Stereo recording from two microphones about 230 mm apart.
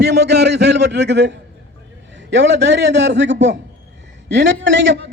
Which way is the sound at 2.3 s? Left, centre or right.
Right.